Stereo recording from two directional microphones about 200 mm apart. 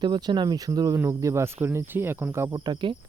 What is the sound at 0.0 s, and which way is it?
Speech, 20° right (ahead or behind).